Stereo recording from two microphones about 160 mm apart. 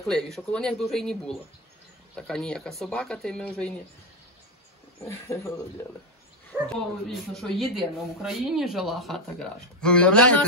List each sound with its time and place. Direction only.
0.0 s speech: centre (ahead or behind)
5.0 s speech: 15° left (ahead or behind)
6.5 s speech: 10° right (ahead or behind)
7.1 s speech: centre (ahead or behind)